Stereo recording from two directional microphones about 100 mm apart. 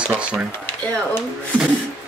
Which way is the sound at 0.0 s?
10° right (ahead or behind).